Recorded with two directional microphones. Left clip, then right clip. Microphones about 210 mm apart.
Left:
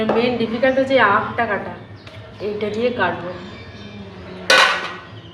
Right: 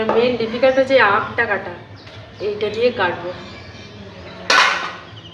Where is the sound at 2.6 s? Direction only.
15° right (ahead or behind).